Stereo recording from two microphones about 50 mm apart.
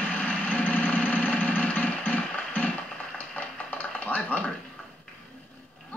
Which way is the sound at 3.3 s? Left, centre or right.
Left.